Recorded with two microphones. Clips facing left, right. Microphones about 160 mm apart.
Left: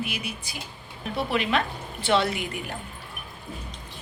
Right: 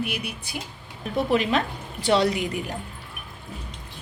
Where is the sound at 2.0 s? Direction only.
35° right (ahead or behind).